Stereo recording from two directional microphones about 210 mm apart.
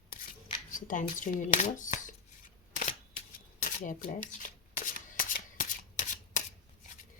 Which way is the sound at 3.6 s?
35° left (ahead or behind).